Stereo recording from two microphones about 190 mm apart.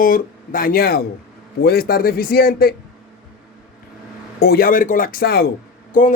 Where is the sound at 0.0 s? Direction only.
45° left (ahead or behind).